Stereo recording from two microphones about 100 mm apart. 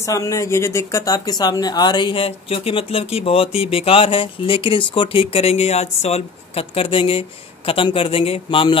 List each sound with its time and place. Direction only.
0.0 s speech: 35° left (ahead or behind); by 8.7 s 60° left (ahead or behind)